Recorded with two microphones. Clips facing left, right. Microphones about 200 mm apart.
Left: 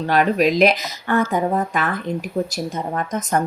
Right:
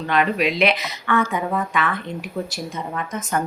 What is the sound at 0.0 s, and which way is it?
A woman's voice, 40° left (ahead or behind).